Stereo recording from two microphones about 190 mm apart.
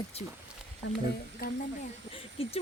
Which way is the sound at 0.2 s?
35° left (ahead or behind).